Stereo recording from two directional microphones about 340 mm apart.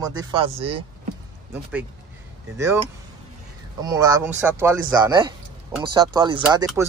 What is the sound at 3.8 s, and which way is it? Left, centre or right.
Speech, centre.